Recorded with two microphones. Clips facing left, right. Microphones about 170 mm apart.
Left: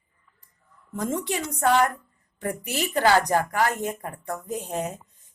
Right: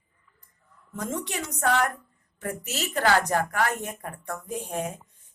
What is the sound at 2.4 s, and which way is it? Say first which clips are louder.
Speech: left 4 dB; 15° left (ahead or behind).